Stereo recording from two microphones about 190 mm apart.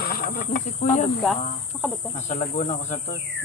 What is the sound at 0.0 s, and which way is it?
Cricket, 50° left (ahead or behind).